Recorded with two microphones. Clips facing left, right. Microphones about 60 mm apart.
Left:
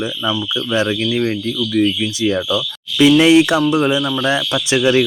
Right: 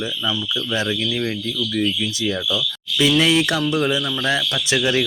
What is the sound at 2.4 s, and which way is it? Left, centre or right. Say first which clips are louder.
Speech: left 4 dB; left.